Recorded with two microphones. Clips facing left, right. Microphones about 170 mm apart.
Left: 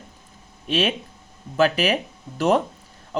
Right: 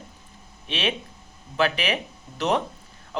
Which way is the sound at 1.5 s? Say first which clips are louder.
Left 5 dB; 40° left (ahead or behind).